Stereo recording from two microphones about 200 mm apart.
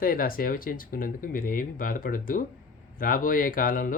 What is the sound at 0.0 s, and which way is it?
Speech, 45° left (ahead or behind).